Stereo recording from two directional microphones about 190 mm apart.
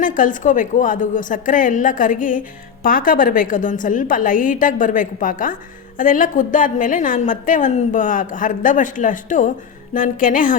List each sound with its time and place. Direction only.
0.0 s a woman's voice: 45° left (ahead or behind)